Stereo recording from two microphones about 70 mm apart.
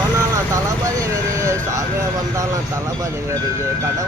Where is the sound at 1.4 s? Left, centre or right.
Right.